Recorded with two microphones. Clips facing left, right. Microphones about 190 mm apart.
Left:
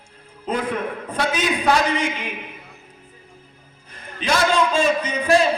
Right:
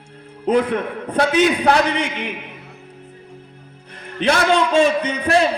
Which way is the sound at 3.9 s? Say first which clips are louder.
Right 4 dB; 65° right (ahead or behind).